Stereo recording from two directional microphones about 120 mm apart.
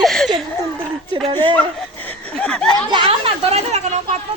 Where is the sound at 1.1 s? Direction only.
45° right (ahead or behind).